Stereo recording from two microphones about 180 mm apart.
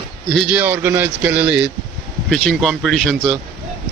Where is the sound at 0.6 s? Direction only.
10° right (ahead or behind).